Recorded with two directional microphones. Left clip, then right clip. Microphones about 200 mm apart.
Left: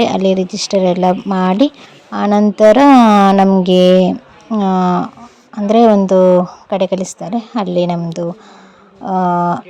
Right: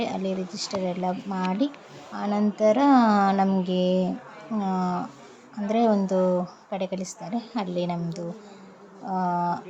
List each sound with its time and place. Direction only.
0.0 s speech: 45° left (ahead or behind)